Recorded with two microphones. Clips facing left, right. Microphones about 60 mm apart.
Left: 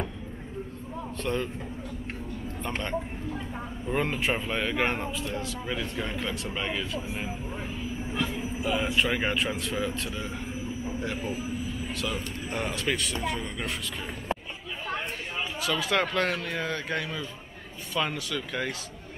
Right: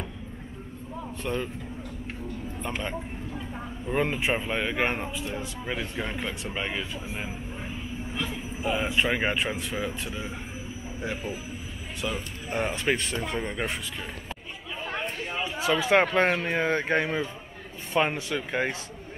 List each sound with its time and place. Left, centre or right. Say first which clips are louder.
1.2 s speech: left 1 dB; centre
2.6 s speech: left 2 dB; centre
8.6 s speech: right 1 dB; centre
14.9 s speech: right 1 dB; right